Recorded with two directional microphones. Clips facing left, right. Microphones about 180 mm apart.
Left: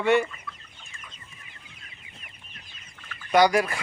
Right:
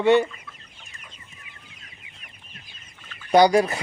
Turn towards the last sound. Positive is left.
turn(degrees=-25)  # may be behind; listen again after turning